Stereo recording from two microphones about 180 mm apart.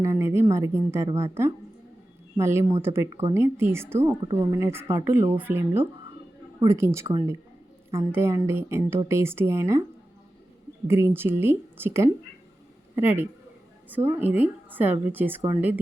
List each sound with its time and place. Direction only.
0.0 s a woman's voice: 15° right (ahead or behind)
2.4 s a woman's voice: 15° right (ahead or behind)
10.8 s a woman's voice: 15° right (ahead or behind)